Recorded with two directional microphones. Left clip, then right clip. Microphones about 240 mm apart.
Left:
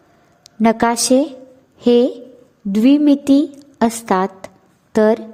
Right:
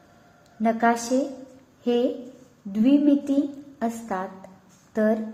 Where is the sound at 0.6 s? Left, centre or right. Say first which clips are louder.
Left 7 dB; left.